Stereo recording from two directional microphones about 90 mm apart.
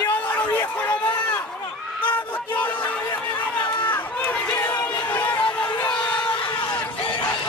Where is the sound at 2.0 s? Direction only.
20° left (ahead or behind).